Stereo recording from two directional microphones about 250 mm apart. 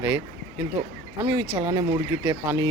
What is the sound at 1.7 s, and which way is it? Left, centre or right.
Speech, centre.